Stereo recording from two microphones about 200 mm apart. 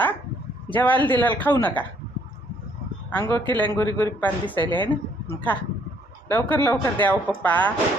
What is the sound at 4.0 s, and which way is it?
Speech, 10° left (ahead or behind).